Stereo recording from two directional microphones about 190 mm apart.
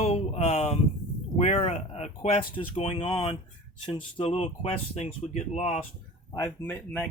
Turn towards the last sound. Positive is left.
turn(degrees=10)  # may be behind; listen again after turning